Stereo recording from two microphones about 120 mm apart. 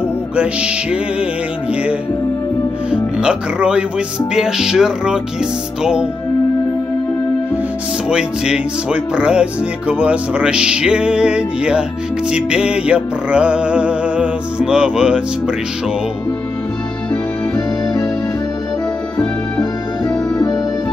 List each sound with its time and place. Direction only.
0.4 s speech: 10° right (ahead or behind)
2.9 s speech: 10° right (ahead or behind)
4.3 s music: 5° right (ahead or behind)
5.8 s speech: 5° right (ahead or behind)
8.1 s speech: 5° right (ahead or behind)
17.6 s music: 30° left (ahead or behind)
19.1 s music: 30° left (ahead or behind)